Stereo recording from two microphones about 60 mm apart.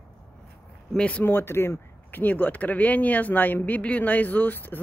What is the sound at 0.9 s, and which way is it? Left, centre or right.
Speech, centre.